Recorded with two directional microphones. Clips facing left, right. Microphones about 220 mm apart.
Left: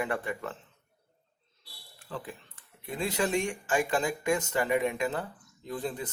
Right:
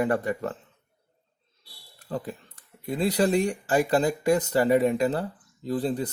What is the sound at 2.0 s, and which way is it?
Speech, 40° right (ahead or behind).